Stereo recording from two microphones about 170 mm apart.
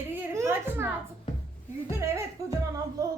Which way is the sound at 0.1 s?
15° right (ahead or behind).